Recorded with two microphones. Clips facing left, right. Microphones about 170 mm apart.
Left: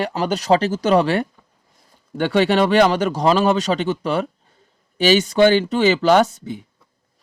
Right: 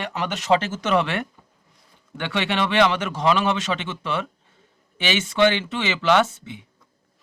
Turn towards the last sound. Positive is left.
turn(degrees=40)  # may be behind; listen again after turning